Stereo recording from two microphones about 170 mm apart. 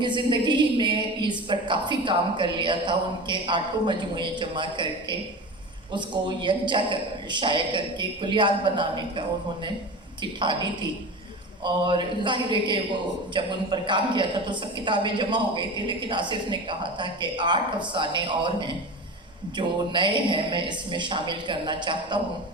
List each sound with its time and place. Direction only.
0.0 s a woman's voice: 25° right (ahead or behind)
10.4 s a woman's voice: 25° right (ahead or behind)